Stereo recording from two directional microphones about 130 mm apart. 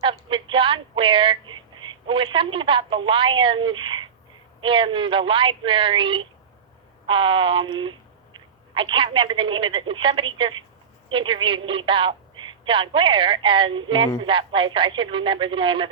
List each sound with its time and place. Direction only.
0.0 s a woman's voice: 40° right (ahead or behind)